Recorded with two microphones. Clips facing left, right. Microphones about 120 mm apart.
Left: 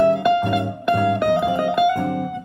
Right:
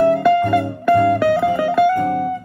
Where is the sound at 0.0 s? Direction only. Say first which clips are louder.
Right 3 dB; 20° left (ahead or behind).